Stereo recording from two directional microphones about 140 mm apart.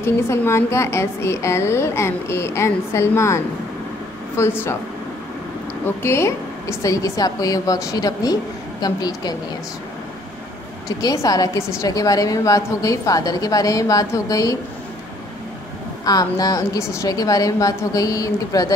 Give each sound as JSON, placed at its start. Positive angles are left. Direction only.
{"t": 0.0, "sound": "a woman's voice", "side_deg": 20}
{"t": 4.4, "sound": "speech", "side_deg": 20}
{"t": 5.9, "sound": "a woman's voice", "side_deg": 20}
{"t": 10.9, "sound": "a woman's voice", "side_deg": 25}
{"t": 16.1, "sound": "a woman's voice", "side_deg": 25}